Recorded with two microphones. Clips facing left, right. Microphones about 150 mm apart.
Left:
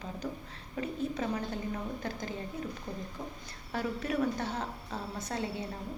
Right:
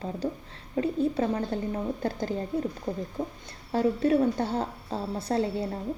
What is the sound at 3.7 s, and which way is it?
A woman's voice, 30° right (ahead or behind).